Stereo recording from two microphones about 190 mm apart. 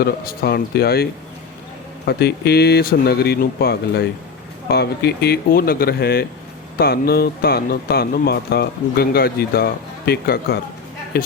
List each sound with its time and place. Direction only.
0.0 s speech: 55° left (ahead or behind)
2.0 s a man's voice: 60° left (ahead or behind)